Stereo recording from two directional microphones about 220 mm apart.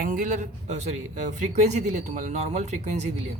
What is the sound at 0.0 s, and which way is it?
Speech, 35° right (ahead or behind).